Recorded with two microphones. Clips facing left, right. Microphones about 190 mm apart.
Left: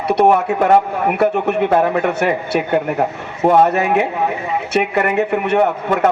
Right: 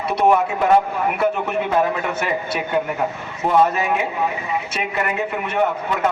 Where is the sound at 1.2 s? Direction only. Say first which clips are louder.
Left 6 dB; 65° left (ahead or behind).